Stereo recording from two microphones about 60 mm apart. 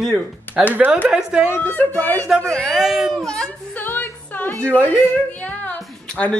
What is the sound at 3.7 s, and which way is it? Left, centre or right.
Music, left.